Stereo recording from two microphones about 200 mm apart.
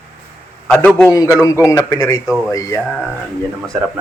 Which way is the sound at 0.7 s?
10° left (ahead or behind).